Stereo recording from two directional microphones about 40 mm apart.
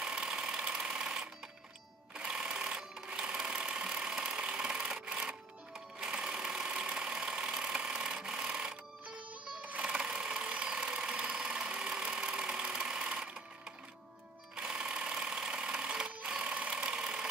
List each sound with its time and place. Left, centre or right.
0.0 s sewing machine: right
6.1 s engine: right
10.0 s engine: right
14.5 s sewing machine: centre
16.4 s engine: right